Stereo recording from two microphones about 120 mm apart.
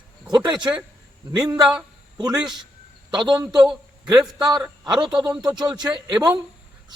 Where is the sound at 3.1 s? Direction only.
40° right (ahead or behind).